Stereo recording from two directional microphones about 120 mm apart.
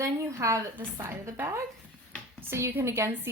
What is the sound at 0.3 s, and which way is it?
A woman's voice, 25° right (ahead or behind).